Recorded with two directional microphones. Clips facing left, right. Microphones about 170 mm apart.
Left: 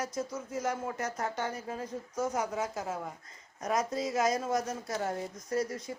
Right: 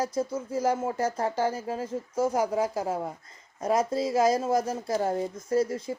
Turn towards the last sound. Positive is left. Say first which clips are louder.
# right 7 dB
turn(degrees=-30)  # may be behind; listen again after turning